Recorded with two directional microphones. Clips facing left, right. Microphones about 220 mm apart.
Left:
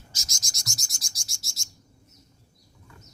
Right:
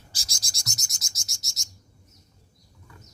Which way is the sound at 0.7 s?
20° right (ahead or behind).